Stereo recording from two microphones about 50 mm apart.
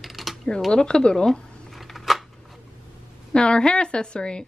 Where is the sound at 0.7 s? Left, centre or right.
Centre.